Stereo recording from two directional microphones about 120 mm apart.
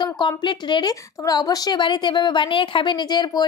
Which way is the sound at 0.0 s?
35° left (ahead or behind).